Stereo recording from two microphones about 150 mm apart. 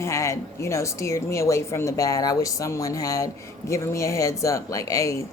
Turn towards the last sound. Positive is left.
turn(degrees=20)  # may be behind; listen again after turning